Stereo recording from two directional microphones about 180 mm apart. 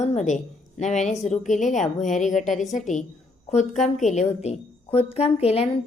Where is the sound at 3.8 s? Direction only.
40° left (ahead or behind).